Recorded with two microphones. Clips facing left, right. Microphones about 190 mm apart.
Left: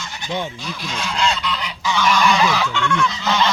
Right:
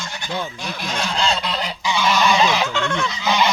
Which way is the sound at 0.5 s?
55° right (ahead or behind).